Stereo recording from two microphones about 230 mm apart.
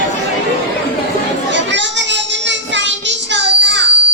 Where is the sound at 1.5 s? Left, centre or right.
Right.